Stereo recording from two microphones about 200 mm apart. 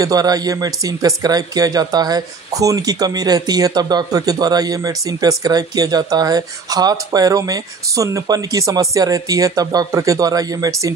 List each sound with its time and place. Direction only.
0.0 s speech: 20° right (ahead or behind)